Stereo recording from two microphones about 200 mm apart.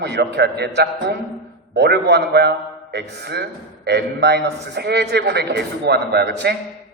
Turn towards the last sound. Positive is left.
turn(degrees=-55)  # may be behind; listen again after turning